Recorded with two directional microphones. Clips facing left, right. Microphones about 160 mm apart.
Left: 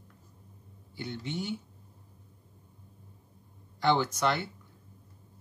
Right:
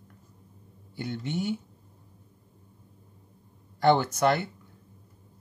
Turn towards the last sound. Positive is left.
turn(degrees=-50)  # may be behind; listen again after turning